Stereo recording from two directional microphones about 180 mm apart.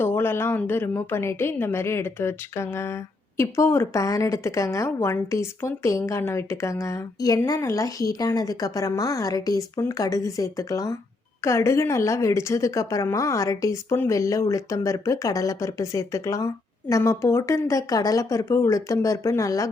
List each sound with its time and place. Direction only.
0.0 s a woman's voice: 10° left (ahead or behind)